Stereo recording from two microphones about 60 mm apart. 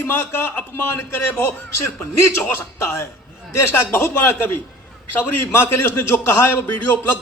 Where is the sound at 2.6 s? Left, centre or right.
Left.